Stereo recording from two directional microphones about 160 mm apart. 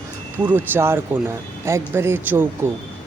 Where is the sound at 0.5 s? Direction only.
15° right (ahead or behind).